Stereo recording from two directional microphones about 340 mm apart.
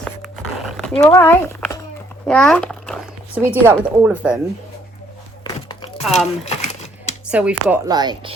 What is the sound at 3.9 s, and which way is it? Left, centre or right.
Speech, centre.